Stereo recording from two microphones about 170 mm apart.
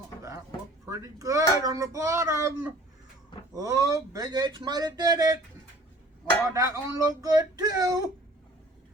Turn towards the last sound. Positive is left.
turn(degrees=-20)  # may be behind; listen again after turning